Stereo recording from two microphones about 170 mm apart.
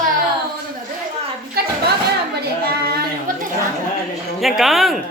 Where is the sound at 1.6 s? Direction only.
65° right (ahead or behind).